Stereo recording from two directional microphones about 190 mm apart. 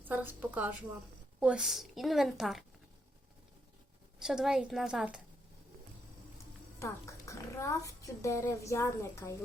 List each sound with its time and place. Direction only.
0.0 s a woman's voice: 10° right (ahead or behind)
4.2 s a woman's voice: 5° right (ahead or behind)
6.7 s a child's voice: 15° left (ahead or behind)